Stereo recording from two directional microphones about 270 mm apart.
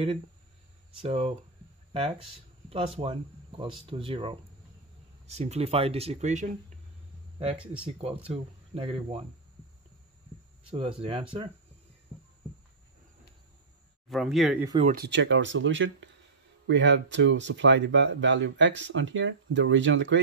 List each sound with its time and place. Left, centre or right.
1.0 s speech: right
2.7 s speech: right
7.5 s speech: centre
7.8 s speech: right
10.7 s speech: centre
14.0 s speech: centre
14.8 s speech: right